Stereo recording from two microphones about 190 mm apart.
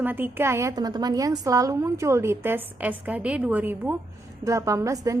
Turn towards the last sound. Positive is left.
turn(degrees=-15)  # may be behind; listen again after turning